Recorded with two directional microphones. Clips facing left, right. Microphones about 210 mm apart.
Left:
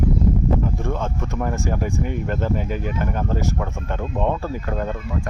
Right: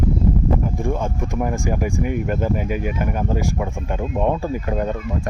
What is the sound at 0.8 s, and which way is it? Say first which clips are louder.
Speech: right 2 dB; 10° right (ahead or behind).